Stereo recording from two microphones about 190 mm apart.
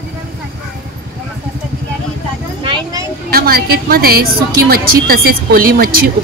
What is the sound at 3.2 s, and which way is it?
A woman's voice, 55° right (ahead or behind).